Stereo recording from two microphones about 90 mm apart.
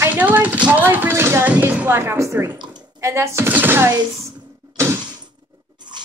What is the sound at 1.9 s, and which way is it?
Speech, 25° right (ahead or behind).